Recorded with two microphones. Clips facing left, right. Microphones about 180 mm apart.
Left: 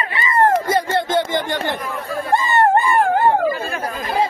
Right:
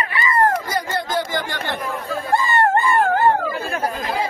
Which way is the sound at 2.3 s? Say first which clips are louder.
Left 2 dB; 20° left (ahead or behind).